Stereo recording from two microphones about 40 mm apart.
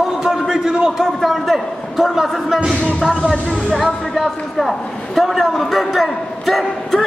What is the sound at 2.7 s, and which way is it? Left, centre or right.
Speech, left.